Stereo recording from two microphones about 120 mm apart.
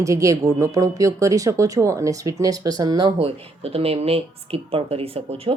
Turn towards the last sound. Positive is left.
turn(degrees=-55)  # may be behind; listen again after turning